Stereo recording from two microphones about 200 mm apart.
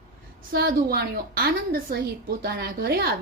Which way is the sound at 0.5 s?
50° right (ahead or behind).